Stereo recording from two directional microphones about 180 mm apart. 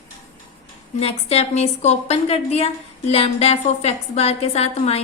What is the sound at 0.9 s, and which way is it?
A woman's voice, 35° left (ahead or behind).